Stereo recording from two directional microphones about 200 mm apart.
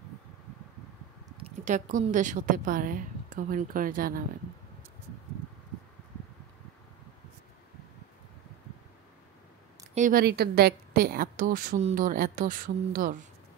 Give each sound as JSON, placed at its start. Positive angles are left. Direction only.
{"t": 1.4, "sound": "a woman's voice", "side_deg": -40}
{"t": 9.9, "sound": "a woman's voice", "side_deg": -45}